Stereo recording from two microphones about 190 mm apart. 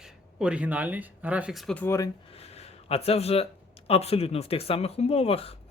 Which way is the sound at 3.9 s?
30° left (ahead or behind).